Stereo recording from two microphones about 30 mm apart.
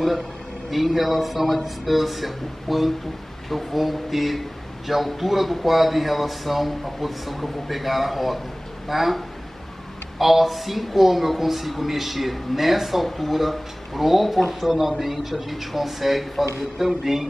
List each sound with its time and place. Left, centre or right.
0.7 s speech: centre
10.1 s speech: centre